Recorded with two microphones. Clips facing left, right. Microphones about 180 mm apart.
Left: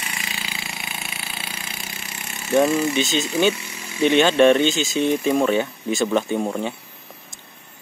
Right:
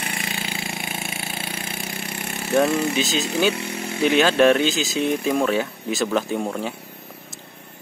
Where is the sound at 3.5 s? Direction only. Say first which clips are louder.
Right 8 dB; 60° right (ahead or behind).